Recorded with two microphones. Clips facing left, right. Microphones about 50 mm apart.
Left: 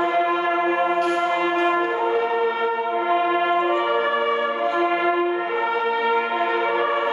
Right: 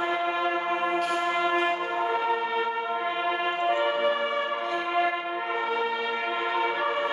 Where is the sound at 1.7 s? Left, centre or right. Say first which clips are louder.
Left 7 dB; left.